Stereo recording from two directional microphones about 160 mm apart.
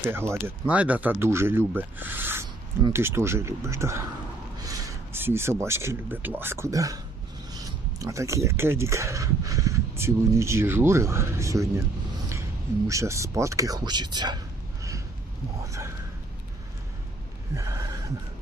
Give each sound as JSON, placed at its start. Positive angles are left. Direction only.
{"t": 0.0, "sound": "speech", "side_deg": -15}
{"t": 12.9, "sound": "speech", "side_deg": -20}
{"t": 14.8, "sound": "a sound", "side_deg": -20}
{"t": 15.6, "sound": "speech", "side_deg": -20}
{"t": 17.5, "sound": "gasp", "side_deg": -20}